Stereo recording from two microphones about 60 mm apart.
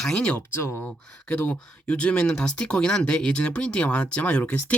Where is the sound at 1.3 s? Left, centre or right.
Left.